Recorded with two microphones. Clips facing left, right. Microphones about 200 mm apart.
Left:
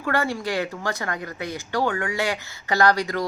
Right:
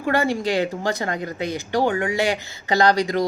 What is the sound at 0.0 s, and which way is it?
Speech, 20° right (ahead or behind).